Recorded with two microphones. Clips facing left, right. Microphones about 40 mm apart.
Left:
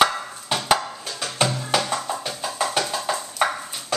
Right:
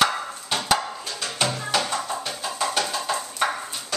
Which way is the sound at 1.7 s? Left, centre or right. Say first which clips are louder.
Left 1 dB; centre.